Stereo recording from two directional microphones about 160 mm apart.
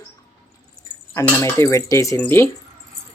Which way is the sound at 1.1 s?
20° left (ahead or behind).